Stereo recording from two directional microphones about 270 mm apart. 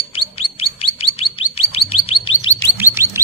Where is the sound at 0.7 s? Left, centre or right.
Left.